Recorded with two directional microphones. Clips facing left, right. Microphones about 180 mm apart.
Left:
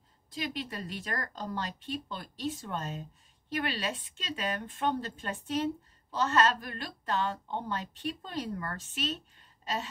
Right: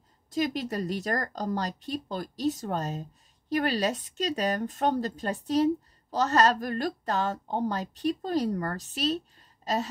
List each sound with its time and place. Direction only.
0.3 s speech: 45° right (ahead or behind)